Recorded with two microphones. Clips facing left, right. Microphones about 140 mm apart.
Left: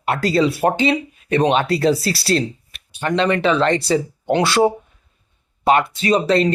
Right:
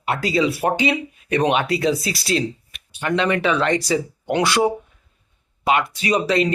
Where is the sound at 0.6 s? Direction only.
30° left (ahead or behind).